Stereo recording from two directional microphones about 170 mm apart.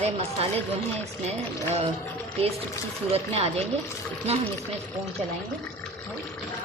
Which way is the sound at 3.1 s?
35° right (ahead or behind).